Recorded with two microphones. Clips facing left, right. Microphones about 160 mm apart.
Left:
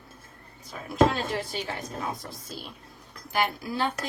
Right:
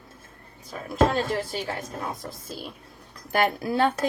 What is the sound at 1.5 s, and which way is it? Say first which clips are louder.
Speech: right 3 dB; 45° right (ahead or behind).